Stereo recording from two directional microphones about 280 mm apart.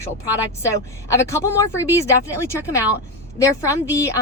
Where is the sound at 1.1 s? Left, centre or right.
Centre.